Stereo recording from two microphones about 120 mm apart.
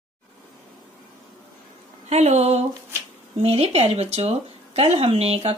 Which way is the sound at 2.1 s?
65° right (ahead or behind).